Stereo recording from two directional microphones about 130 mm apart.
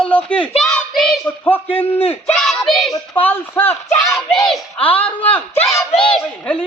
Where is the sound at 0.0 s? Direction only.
10° left (ahead or behind).